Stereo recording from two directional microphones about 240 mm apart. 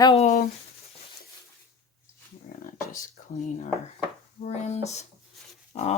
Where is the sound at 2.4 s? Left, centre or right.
Left.